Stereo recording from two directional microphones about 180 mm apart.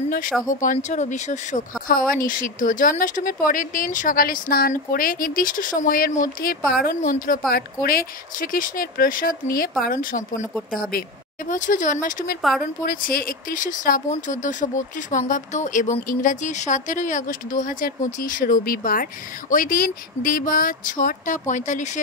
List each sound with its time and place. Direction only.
0.6 s speech: 40° left (ahead or behind)
10.7 s speech: 55° left (ahead or behind)
12.4 s speech: centre (ahead or behind)
12.8 s speech: 50° left (ahead or behind)